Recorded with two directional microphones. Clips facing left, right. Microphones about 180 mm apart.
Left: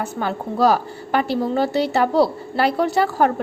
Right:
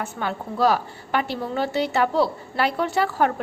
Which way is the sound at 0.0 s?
40° left (ahead or behind).